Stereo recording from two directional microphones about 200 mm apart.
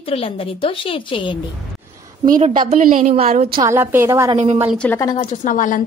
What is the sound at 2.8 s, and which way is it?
Speech, 40° right (ahead or behind).